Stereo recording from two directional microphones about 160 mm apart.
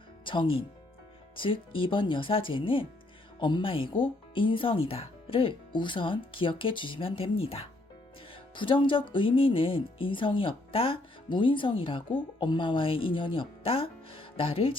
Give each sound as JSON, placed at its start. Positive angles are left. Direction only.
{"t": 0.3, "sound": "speech", "side_deg": 30}